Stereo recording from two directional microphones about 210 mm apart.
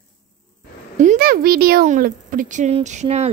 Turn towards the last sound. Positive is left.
turn(degrees=-30)  # may be behind; listen again after turning